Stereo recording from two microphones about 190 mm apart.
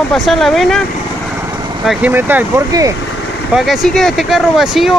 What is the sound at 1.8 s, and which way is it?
Speech, centre (ahead or behind).